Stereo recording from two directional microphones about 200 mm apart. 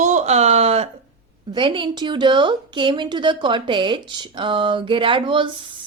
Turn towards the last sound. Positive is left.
turn(degrees=-25)  # may be behind; listen again after turning